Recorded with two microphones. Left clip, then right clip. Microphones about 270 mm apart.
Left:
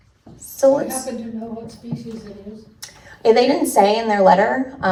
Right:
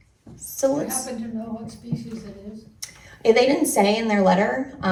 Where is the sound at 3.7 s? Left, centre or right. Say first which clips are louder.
Left 5 dB; left.